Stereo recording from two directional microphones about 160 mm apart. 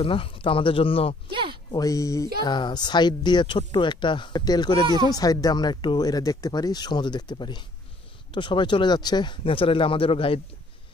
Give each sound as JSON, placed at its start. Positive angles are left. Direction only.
{"t": 0.0, "sound": "speech", "side_deg": 35}
{"t": 1.3, "sound": "a sound", "side_deg": -30}
{"t": 1.7, "sound": "speech", "side_deg": 20}
{"t": 4.8, "sound": "speech", "side_deg": -25}
{"t": 5.1, "sound": "speech", "side_deg": 25}